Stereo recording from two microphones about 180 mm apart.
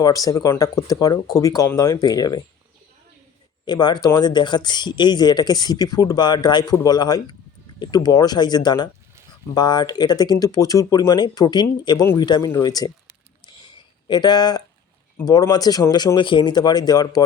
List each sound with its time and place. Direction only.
0.0 s speech: 20° left (ahead or behind)
3.7 s speech: 25° left (ahead or behind)
14.1 s speech: 25° left (ahead or behind)